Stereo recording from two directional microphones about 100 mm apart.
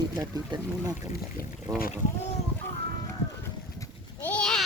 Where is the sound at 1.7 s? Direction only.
25° right (ahead or behind).